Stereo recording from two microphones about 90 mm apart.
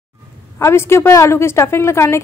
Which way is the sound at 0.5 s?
30° left (ahead or behind).